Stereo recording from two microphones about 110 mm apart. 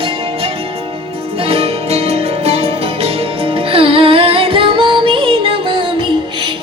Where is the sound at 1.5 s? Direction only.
65° right (ahead or behind).